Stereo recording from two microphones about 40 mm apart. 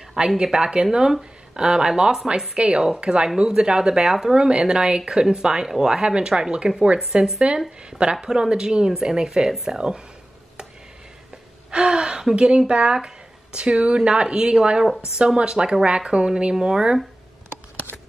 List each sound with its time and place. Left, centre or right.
0.4 s speech: right
11.7 s speech: centre
16.5 s speech: centre